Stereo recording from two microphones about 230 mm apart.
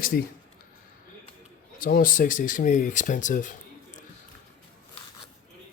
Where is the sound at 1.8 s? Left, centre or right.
Left.